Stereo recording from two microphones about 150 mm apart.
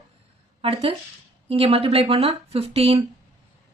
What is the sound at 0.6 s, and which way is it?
A woman's voice, 40° right (ahead or behind).